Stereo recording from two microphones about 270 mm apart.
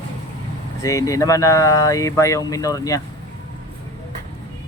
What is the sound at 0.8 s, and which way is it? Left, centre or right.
Speech, centre.